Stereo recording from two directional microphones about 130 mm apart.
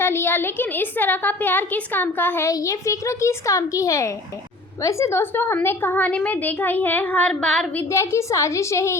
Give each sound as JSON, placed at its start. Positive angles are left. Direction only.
{"t": 0.0, "sound": "a woman's voice", "side_deg": 15}
{"t": 2.5, "sound": "a woman's voice", "side_deg": 25}
{"t": 7.8, "sound": "a woman's voice", "side_deg": 20}